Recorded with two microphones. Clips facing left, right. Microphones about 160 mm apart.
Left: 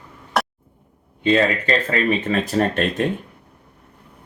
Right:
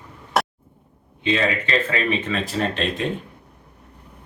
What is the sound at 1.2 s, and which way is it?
Speech, 45° left (ahead or behind).